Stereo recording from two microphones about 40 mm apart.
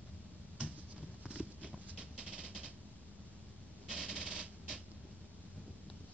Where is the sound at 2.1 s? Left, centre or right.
Right.